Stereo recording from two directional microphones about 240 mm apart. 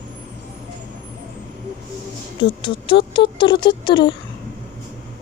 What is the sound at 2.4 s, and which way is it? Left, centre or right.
Speech, left.